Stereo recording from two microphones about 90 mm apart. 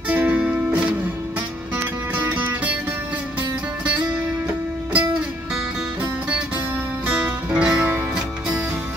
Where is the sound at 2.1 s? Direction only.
20° right (ahead or behind).